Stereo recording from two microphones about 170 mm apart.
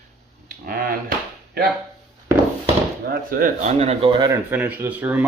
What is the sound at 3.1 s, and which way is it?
Speech, 60° right (ahead or behind).